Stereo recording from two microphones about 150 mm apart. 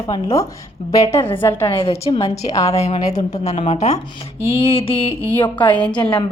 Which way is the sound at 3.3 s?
45° left (ahead or behind).